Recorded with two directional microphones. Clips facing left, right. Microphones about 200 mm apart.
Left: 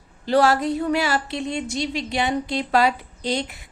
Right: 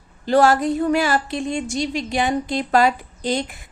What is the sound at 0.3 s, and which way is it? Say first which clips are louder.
A woman's voice: right 2 dB; 45° right (ahead or behind).